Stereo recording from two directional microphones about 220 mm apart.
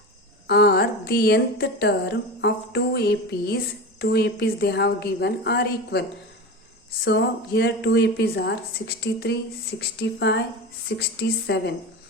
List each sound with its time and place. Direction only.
0.4 s a woman's voice: 50° left (ahead or behind)